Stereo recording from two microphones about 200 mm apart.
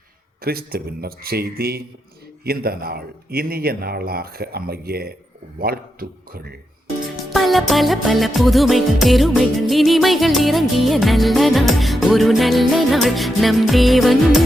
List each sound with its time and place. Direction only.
0.4 s speech: 50° right (ahead or behind)
7.3 s music: centre (ahead or behind)